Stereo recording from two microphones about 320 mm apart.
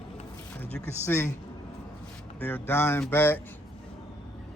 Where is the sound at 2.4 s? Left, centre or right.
Centre.